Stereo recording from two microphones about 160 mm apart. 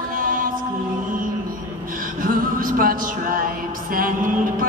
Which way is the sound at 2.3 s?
60° right (ahead or behind).